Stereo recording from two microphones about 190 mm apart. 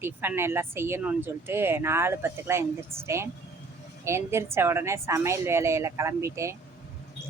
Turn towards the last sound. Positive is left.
turn(degrees=-15)  # may be behind; listen again after turning